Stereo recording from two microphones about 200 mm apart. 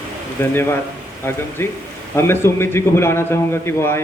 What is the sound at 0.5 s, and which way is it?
Speech, 10° left (ahead or behind).